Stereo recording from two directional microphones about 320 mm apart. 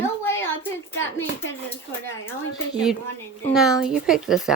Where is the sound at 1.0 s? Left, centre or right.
Left.